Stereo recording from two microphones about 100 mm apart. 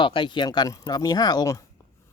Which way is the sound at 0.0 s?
55° left (ahead or behind).